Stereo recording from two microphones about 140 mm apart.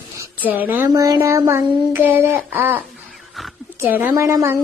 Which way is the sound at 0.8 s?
25° right (ahead or behind).